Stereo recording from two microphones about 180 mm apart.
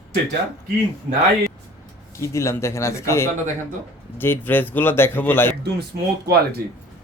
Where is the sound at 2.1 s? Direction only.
15° left (ahead or behind).